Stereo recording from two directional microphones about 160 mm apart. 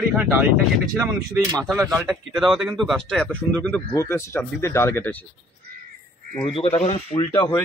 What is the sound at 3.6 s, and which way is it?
Speech, 15° left (ahead or behind).